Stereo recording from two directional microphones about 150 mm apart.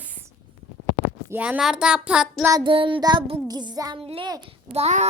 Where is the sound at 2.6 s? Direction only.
35° right (ahead or behind).